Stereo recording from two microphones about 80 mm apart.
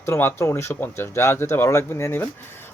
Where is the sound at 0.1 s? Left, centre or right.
Left.